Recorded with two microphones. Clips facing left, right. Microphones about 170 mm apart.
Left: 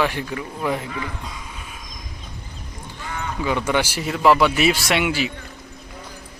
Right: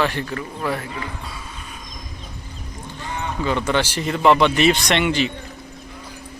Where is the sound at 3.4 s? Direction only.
10° left (ahead or behind).